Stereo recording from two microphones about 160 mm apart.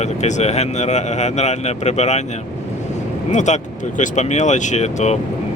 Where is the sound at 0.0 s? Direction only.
45° left (ahead or behind).